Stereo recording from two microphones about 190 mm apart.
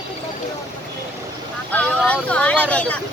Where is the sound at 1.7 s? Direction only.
10° left (ahead or behind).